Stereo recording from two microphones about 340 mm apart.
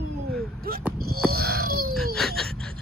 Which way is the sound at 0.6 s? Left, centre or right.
Right.